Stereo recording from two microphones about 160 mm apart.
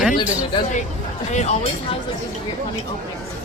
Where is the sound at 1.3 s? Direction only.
45° left (ahead or behind).